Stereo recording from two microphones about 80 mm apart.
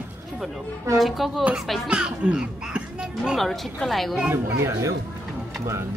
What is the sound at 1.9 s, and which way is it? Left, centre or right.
A child's voice, centre.